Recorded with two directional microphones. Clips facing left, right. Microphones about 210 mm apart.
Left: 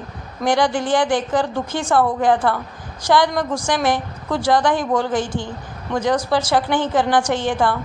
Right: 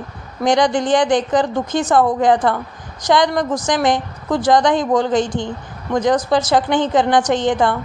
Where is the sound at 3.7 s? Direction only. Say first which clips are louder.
Right 2 dB; 15° right (ahead or behind).